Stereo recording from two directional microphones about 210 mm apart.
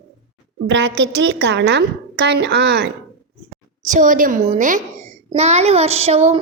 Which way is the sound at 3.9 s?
40° right (ahead or behind).